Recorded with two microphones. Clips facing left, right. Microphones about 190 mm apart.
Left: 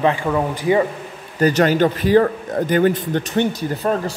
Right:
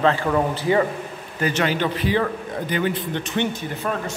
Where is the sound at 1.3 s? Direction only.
40° left (ahead or behind).